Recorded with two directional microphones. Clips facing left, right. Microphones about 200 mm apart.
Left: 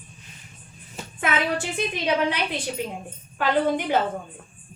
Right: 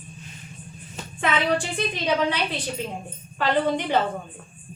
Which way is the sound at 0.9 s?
5° left (ahead or behind).